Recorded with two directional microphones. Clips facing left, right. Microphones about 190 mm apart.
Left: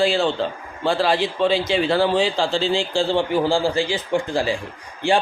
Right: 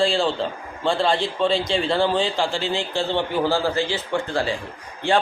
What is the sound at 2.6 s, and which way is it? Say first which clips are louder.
Speech: left 4 dB; 90° left.